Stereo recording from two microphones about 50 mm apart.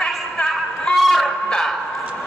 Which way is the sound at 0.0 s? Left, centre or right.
Left.